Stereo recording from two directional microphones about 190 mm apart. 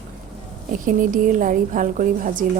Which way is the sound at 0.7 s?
45° right (ahead or behind).